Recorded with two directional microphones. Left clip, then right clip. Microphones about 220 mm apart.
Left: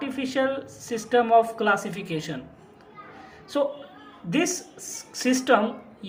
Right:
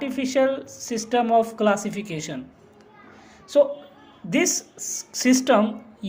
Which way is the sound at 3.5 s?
40° right (ahead or behind).